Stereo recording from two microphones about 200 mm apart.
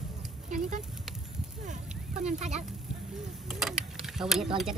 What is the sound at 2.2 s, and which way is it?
Speech, 35° right (ahead or behind).